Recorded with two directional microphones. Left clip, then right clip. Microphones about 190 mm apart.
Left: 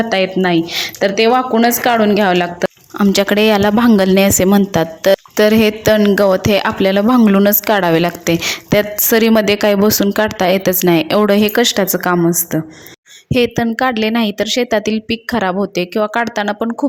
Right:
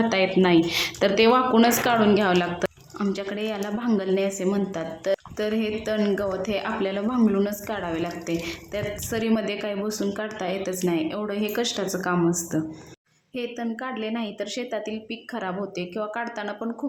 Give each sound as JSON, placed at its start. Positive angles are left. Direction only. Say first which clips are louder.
{"t": 0.1, "sound": "a woman's voice", "louder": "left 5 dB", "side_deg": 25}
{"t": 3.0, "sound": "a woman's voice", "louder": "left 16 dB", "side_deg": 55}
{"t": 13.3, "sound": "a woman's voice", "louder": "left 16 dB", "side_deg": 50}